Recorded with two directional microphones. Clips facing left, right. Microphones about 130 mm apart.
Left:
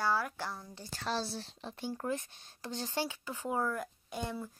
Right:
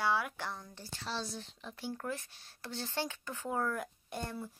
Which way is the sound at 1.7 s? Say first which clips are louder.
Left 3 dB; 20° left (ahead or behind).